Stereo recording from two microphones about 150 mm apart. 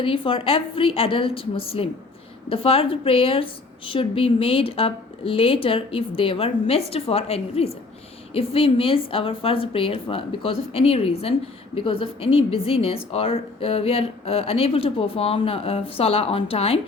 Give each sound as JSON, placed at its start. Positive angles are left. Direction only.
{"t": 0.0, "sound": "a woman's voice", "side_deg": 35}